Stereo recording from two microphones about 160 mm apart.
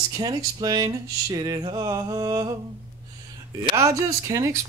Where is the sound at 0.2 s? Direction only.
25° right (ahead or behind).